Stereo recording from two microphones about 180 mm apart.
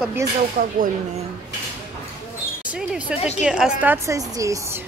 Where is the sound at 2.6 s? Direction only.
5° right (ahead or behind).